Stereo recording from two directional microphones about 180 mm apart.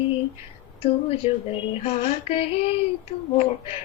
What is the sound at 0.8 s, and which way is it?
Child singing, 30° left (ahead or behind).